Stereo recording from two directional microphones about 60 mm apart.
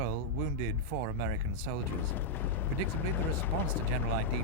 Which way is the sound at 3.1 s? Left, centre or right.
Left.